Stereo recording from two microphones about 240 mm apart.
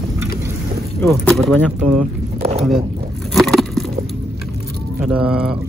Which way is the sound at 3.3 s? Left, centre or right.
Centre.